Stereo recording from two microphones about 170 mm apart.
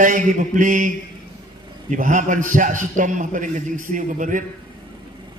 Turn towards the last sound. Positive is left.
turn(degrees=-50)  # may be behind; listen again after turning